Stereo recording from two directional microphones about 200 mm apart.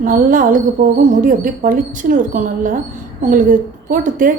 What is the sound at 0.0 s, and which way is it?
Speech, 40° right (ahead or behind).